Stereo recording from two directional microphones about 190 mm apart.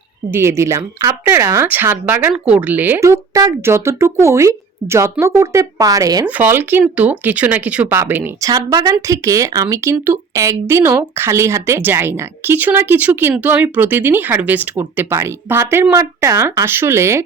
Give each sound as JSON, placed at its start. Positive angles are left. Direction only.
{"t": 0.3, "sound": "speech", "side_deg": -15}